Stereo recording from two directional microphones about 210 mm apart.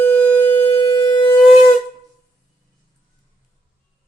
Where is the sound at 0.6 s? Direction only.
25° left (ahead or behind).